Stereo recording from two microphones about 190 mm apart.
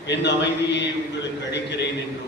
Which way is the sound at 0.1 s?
65° left (ahead or behind).